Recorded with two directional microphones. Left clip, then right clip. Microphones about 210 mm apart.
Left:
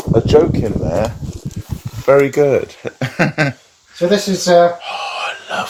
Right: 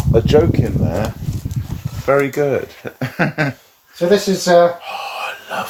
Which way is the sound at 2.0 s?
25° left (ahead or behind).